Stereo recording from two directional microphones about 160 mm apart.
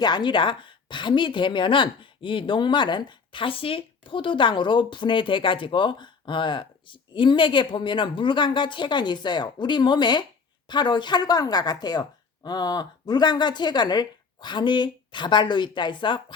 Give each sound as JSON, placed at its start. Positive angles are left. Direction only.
{"t": 0.0, "sound": "a woman's voice", "side_deg": 30}